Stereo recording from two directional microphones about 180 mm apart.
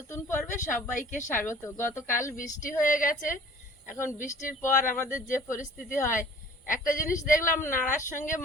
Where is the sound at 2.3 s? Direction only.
50° left (ahead or behind).